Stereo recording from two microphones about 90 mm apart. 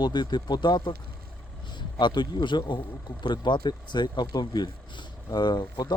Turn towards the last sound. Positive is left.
turn(degrees=55)  # may be behind; listen again after turning